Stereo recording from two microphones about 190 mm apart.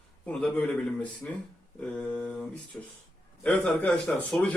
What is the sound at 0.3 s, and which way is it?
A man's voice, 5° left (ahead or behind).